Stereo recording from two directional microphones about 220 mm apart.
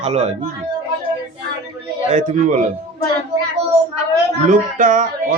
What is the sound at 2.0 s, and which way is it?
Speech, 35° right (ahead or behind).